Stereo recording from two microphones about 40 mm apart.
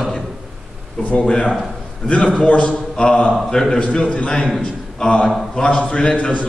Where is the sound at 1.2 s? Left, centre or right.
Centre.